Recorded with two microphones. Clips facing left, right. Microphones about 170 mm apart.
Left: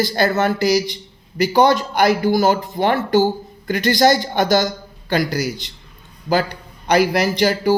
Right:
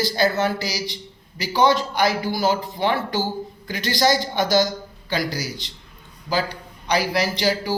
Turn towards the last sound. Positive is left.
turn(degrees=50)  # may be behind; listen again after turning